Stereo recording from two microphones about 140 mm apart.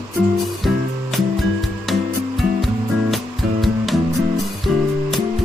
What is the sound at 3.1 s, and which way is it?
Music, centre (ahead or behind).